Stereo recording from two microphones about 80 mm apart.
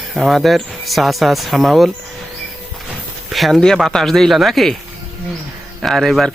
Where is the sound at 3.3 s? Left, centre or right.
Centre.